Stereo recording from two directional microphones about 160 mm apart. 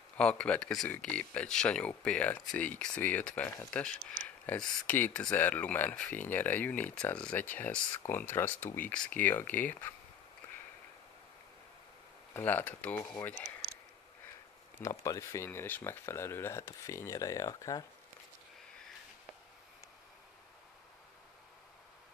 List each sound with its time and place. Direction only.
0.2 s speech: 5° left (ahead or behind)
12.4 s speech: 10° left (ahead or behind)
14.8 s speech: 20° left (ahead or behind)